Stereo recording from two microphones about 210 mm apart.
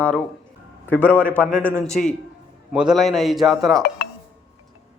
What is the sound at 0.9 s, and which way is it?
A man's voice, 10° left (ahead or behind).